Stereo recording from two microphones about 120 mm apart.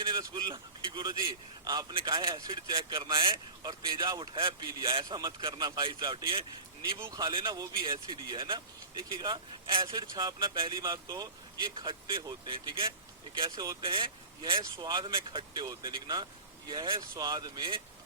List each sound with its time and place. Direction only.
0.1 s a man's voice: 40° right (ahead or behind)
1.9 s speech: 45° right (ahead or behind)
2.3 s speech: 35° right (ahead or behind)
2.9 s speech: 45° right (ahead or behind)